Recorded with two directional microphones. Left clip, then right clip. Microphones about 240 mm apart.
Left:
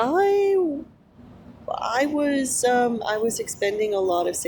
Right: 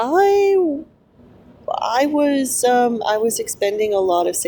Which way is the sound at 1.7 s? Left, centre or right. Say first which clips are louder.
Right 5 dB; right.